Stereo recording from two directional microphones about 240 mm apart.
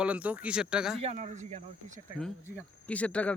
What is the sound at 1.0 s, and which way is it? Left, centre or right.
Speech, right.